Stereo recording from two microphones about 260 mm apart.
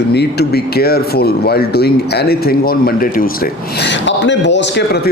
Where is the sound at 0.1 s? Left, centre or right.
Left.